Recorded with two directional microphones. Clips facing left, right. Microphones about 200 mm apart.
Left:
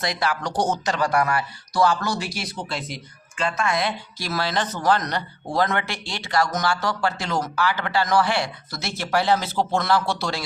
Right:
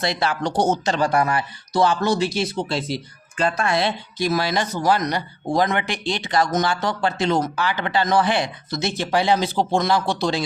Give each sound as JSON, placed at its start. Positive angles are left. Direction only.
{"t": 0.0, "sound": "a man's voice", "side_deg": -25}
{"t": 4.2, "sound": "a man's voice", "side_deg": -15}